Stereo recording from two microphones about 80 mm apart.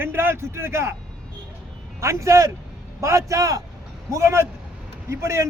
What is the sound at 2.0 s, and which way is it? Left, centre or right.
A man's voice, right.